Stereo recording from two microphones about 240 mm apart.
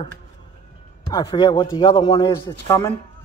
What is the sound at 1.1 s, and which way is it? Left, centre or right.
A man's voice, centre.